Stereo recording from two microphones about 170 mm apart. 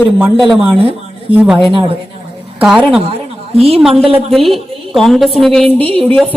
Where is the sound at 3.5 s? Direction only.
35° right (ahead or behind).